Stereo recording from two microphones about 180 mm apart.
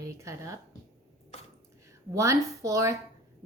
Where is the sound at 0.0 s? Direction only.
15° right (ahead or behind).